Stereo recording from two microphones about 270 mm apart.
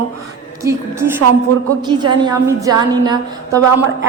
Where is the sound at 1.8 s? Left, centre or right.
Centre.